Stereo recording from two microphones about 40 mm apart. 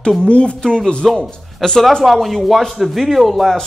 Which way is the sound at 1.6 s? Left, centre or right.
Centre.